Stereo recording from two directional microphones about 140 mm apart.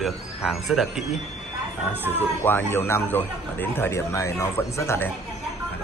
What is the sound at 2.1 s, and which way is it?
Speech, 15° left (ahead or behind).